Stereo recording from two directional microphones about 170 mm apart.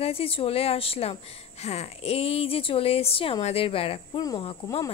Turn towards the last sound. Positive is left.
turn(degrees=30)  # may be behind; listen again after turning